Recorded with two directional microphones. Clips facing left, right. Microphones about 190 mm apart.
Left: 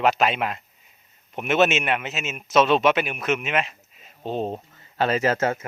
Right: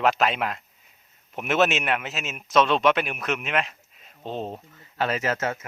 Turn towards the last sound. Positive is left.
turn(degrees=30)  # may be behind; listen again after turning